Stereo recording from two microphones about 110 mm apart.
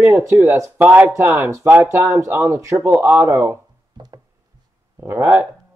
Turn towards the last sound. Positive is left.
turn(degrees=-20)  # may be behind; listen again after turning